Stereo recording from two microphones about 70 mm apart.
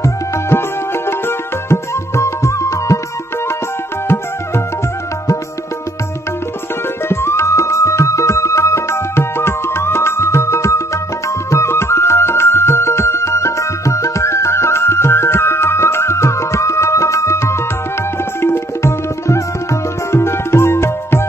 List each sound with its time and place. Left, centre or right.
0.0 s music: left
7.1 s music: left
18.4 s tabla: left